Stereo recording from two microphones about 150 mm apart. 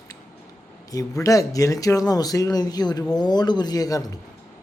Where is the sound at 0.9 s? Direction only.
20° left (ahead or behind).